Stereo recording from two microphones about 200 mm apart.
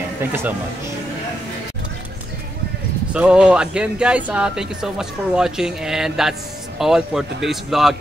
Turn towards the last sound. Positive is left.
turn(degrees=0)  # may be behind; listen again after turning